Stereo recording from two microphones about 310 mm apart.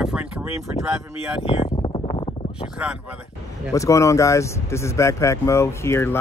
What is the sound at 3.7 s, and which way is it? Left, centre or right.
Speech, centre.